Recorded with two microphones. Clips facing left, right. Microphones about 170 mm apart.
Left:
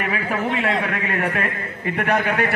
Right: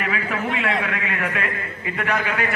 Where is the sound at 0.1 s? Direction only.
40° left (ahead or behind).